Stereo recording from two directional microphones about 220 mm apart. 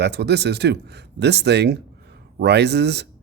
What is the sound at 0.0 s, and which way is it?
Speech, 50° right (ahead or behind).